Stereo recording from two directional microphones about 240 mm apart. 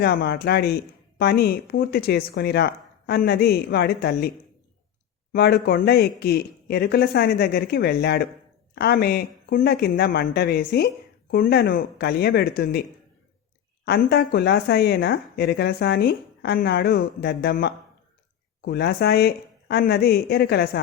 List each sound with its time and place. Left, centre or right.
0.0 s speech: left
5.3 s speech: left
13.8 s speech: left